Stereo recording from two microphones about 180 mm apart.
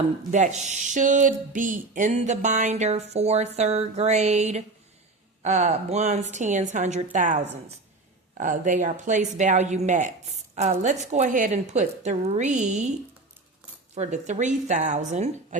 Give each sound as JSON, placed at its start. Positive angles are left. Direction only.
{"t": 0.3, "sound": "a woman's voice", "side_deg": -40}
{"t": 13.9, "sound": "a woman's voice", "side_deg": -40}